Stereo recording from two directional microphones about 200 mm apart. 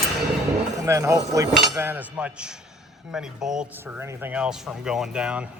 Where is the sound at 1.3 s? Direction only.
15° right (ahead or behind).